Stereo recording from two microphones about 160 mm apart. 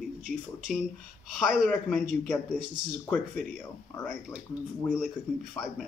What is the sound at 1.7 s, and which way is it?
A man's voice, 10° left (ahead or behind).